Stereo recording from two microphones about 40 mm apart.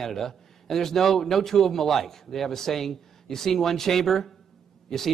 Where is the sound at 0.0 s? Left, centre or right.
Centre.